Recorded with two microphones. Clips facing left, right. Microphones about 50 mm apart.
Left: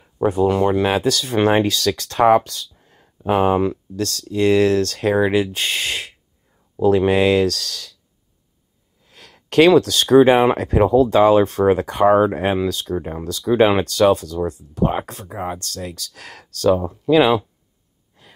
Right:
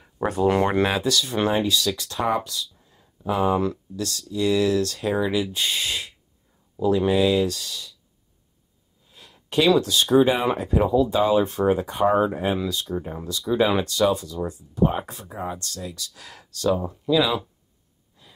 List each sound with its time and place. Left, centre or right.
0.8 s speech: left
1.5 s speech: left
9.0 s a sound: left
9.7 s speech: left